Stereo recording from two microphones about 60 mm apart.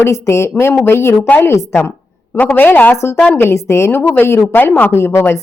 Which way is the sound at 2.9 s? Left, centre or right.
Left.